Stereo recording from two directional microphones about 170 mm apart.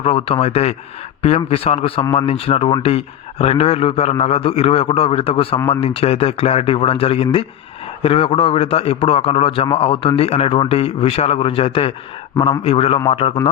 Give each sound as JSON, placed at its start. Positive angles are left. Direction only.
{"t": 0.0, "sound": "a man's voice", "side_deg": 35}